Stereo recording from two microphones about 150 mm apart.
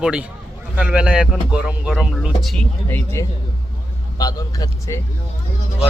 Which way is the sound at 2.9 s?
15° left (ahead or behind).